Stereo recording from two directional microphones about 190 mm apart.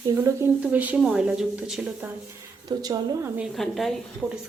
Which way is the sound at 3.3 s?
Centre (ahead or behind).